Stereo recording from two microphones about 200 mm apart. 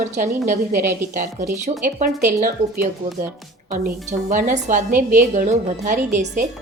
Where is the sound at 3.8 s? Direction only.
40° right (ahead or behind).